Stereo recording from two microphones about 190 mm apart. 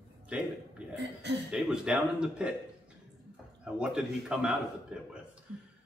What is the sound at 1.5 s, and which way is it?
Speech, 5° right (ahead or behind).